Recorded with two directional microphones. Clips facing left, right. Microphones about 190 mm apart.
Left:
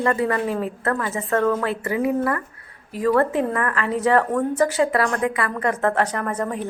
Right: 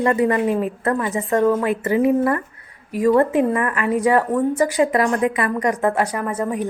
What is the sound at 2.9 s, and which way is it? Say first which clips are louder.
Speech: right 4 dB; 15° right (ahead or behind).